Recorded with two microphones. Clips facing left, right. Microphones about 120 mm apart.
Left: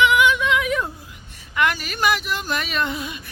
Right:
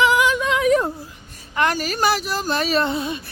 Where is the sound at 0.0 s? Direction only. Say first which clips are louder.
Even; 35° right (ahead or behind).